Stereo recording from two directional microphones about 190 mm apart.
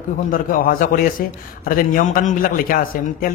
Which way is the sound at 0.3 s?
45° left (ahead or behind).